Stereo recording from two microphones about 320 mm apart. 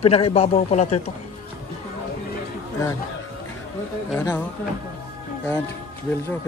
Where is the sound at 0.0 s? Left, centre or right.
Centre.